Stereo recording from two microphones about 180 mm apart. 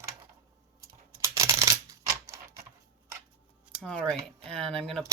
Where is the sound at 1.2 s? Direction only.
15° right (ahead or behind).